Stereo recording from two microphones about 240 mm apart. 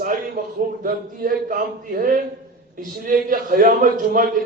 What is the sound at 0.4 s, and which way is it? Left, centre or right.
A man's voice, right.